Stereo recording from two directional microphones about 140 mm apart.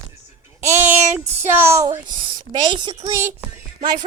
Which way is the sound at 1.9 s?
35° right (ahead or behind).